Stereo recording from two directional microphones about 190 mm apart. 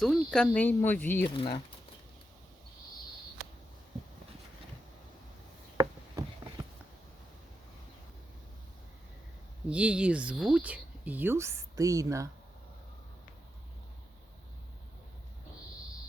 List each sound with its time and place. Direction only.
0.0 s speech: centre (ahead or behind)
1.3 s speech: 25° left (ahead or behind)
5.7 s chopping: 20° right (ahead or behind)
9.6 s speech: 5° right (ahead or behind)